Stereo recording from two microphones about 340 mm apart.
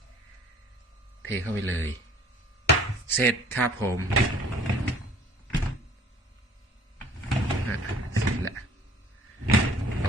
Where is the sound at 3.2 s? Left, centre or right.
Centre.